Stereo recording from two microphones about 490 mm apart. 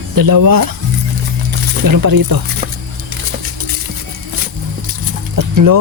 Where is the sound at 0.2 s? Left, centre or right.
Right.